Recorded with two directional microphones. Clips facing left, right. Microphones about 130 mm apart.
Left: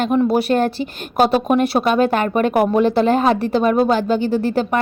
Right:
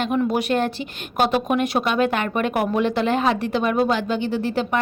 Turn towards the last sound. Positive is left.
turn(degrees=40)  # may be behind; listen again after turning